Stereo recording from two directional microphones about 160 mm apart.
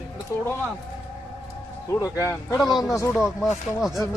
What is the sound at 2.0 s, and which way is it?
Speech, 20° left (ahead or behind).